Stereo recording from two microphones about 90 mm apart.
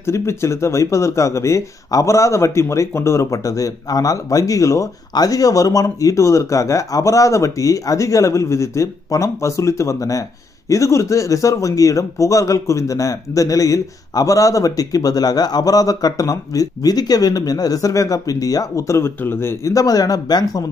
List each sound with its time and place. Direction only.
0.0 s speech: 30° left (ahead or behind)
19.7 s speech: 40° left (ahead or behind)